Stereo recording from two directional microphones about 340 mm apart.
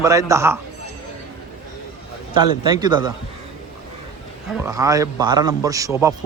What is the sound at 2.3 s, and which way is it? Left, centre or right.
Speech, centre.